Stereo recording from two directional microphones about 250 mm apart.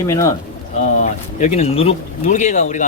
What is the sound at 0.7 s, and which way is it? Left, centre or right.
Speech, left.